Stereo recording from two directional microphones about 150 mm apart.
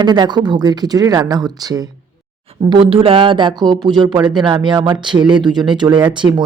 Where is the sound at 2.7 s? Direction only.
35° right (ahead or behind).